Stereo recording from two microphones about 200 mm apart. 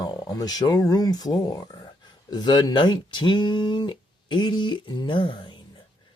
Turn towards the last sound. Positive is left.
turn(degrees=25)  # may be behind; listen again after turning